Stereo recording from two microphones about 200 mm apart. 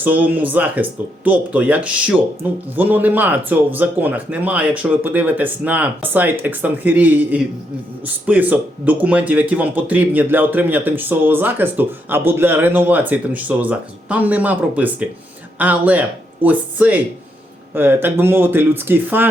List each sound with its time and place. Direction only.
0.0 s speech: 10° right (ahead or behind)